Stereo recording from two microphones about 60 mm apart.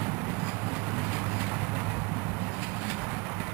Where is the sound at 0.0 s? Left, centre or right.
Right.